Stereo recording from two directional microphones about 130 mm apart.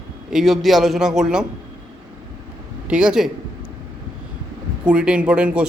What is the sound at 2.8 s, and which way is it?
Speech, 5° right (ahead or behind).